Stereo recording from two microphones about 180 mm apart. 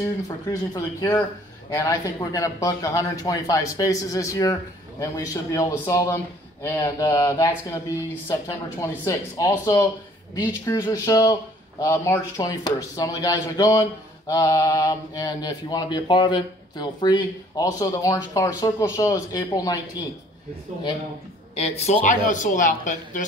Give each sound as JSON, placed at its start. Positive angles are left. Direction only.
{"t": 0.0, "sound": "a man's voice", "side_deg": 20}
{"t": 21.5, "sound": "speech", "side_deg": 35}